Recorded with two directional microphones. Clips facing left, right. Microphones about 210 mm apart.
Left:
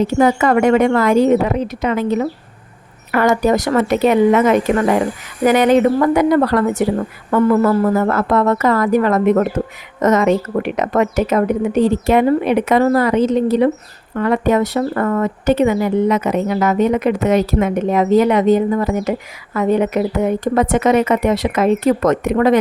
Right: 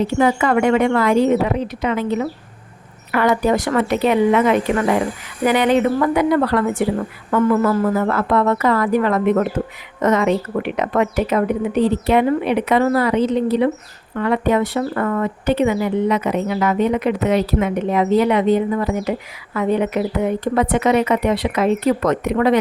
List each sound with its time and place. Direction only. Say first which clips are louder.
0.2 s a woman's voice: left 3 dB; 45° left (ahead or behind)